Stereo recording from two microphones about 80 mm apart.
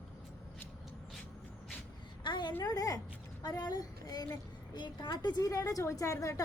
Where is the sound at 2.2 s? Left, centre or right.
Left.